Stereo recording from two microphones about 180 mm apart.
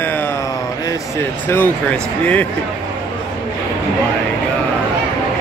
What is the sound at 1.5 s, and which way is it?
Speech, 10° left (ahead or behind).